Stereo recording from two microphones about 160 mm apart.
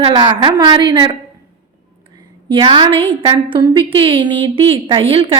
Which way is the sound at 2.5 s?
30° right (ahead or behind).